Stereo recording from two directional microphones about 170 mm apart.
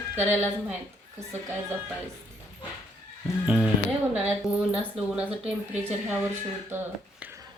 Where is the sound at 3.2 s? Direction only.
5° right (ahead or behind).